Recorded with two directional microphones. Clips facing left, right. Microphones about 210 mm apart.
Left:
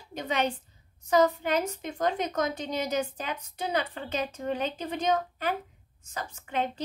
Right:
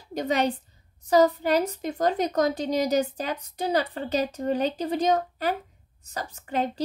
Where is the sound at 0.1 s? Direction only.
40° right (ahead or behind).